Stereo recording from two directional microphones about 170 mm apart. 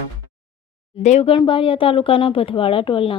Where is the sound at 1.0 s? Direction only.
40° left (ahead or behind).